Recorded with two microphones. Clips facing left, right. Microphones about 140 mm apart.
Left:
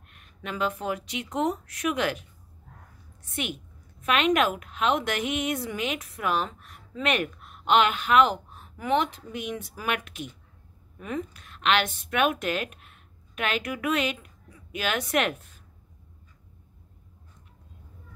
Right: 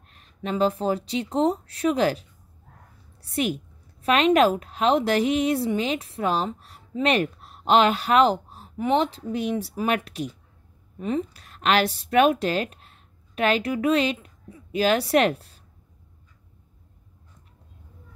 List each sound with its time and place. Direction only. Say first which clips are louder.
0.1 s a woman's voice: right 7 dB; 30° right (ahead or behind)
3.3 s a woman's voice: right 8 dB; 35° right (ahead or behind)